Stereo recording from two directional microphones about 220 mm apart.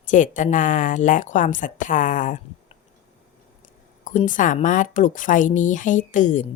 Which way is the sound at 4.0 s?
35° left (ahead or behind).